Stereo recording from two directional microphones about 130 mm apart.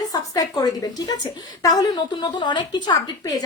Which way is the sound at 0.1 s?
30° left (ahead or behind).